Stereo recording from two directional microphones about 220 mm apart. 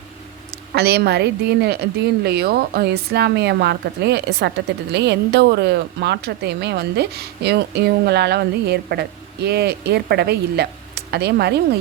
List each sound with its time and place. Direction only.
0.7 s a woman's voice: 45° right (ahead or behind)